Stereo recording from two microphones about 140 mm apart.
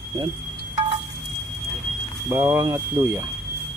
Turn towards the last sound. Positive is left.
turn(degrees=-20)  # may be behind; listen again after turning